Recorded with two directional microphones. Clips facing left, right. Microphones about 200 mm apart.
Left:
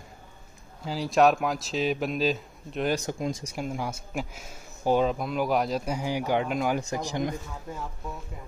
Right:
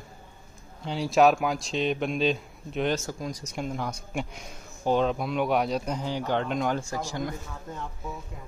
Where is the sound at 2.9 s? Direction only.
20° left (ahead or behind).